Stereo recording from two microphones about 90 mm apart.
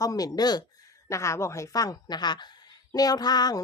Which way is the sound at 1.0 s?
35° left (ahead or behind).